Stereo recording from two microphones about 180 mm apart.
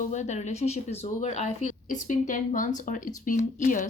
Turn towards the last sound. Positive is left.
turn(degrees=45)  # may be behind; listen again after turning